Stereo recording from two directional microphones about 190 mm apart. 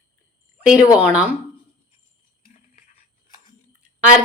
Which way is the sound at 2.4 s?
40° left (ahead or behind).